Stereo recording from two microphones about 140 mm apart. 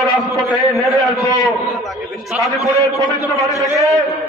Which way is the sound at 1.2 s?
25° left (ahead or behind).